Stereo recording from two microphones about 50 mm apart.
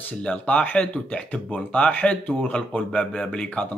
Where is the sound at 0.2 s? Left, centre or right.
Left.